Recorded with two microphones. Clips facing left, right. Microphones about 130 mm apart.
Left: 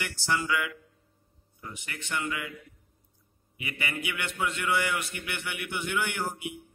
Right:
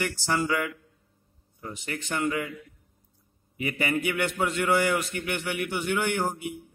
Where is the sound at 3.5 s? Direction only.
40° right (ahead or behind).